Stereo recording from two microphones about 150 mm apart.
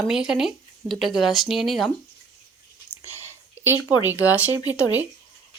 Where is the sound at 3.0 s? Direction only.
15° right (ahead or behind).